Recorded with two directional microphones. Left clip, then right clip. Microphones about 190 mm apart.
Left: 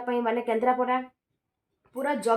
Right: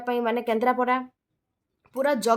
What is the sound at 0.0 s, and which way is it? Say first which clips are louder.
Speech: right 1 dB; 30° right (ahead or behind).